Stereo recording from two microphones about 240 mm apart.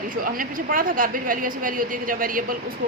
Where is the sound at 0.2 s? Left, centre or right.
Right.